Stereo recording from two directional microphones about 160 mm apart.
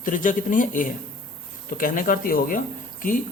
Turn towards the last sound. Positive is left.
turn(degrees=55)  # may be behind; listen again after turning